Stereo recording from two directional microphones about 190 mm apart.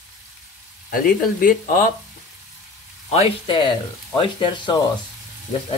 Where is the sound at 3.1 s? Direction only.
30° left (ahead or behind).